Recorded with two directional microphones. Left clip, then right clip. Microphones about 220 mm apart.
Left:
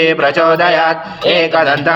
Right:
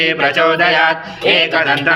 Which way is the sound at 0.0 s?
40° left (ahead or behind).